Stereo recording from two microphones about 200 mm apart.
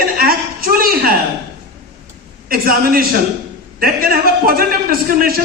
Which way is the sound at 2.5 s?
45° right (ahead or behind).